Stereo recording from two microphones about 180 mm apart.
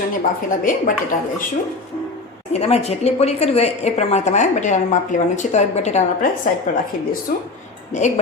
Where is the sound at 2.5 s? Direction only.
35° left (ahead or behind).